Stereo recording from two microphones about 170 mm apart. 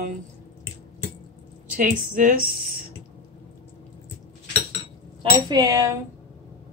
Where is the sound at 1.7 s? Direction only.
50° right (ahead or behind).